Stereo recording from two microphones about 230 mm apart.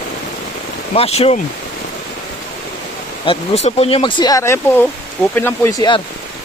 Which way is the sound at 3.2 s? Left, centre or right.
Left.